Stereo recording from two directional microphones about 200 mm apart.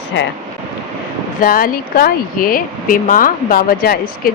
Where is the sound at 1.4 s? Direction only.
45° left (ahead or behind).